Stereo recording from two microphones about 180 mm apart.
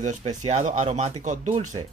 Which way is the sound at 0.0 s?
40° right (ahead or behind).